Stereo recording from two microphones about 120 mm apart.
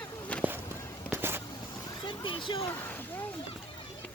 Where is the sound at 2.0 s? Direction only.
40° left (ahead or behind).